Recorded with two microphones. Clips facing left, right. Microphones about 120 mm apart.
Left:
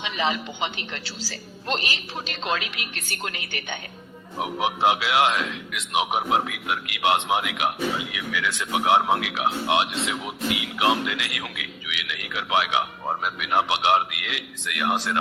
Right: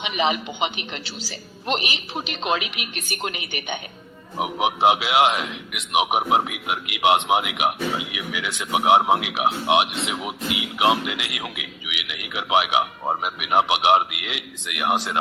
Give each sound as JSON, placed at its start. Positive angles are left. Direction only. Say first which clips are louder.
{"t": 0.0, "sound": "a man's voice", "louder": "right 3 dB", "side_deg": -15}